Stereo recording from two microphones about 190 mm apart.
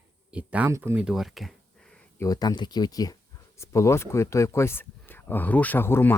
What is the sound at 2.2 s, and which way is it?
Speech, 20° left (ahead or behind).